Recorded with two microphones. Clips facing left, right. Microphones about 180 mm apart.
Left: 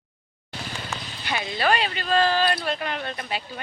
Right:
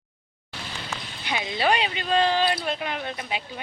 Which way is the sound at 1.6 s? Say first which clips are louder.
Even; 20° right (ahead or behind).